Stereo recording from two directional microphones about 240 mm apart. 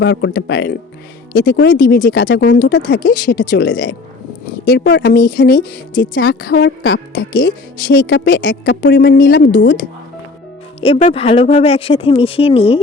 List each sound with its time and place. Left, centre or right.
0.0 s speech: left
10.8 s speech: left